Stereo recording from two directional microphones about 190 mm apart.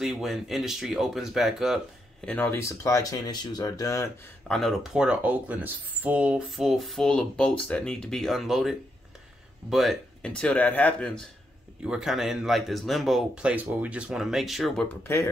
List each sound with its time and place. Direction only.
0.0 s speech: centre (ahead or behind)
2.2 s speech: 10° left (ahead or behind)
4.5 s speech: centre (ahead or behind)
15.1 s speech: 10° left (ahead or behind)